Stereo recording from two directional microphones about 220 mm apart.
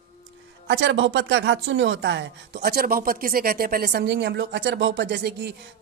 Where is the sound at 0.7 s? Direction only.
55° right (ahead or behind).